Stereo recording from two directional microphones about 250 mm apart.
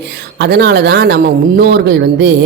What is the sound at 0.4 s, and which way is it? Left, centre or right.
Speech, right.